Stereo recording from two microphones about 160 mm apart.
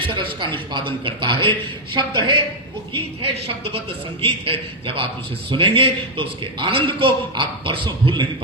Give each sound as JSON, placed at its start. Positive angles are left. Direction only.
{"t": 0.1, "sound": "a man's voice", "side_deg": -30}